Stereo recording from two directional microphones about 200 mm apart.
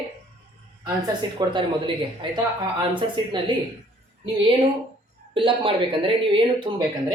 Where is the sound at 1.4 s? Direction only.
20° right (ahead or behind).